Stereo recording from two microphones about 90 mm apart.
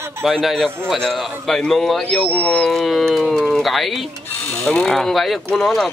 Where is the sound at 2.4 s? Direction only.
10° left (ahead or behind).